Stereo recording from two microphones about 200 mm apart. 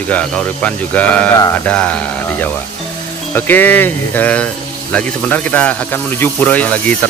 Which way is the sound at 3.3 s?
10° left (ahead or behind).